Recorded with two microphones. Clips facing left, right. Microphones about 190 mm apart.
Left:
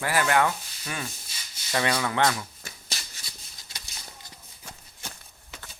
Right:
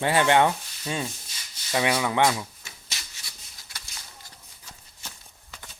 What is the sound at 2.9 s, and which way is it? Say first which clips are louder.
Shuffle: left 1 dB; 25° left (ahead or behind).